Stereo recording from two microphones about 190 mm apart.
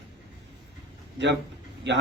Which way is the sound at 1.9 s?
65° right (ahead or behind).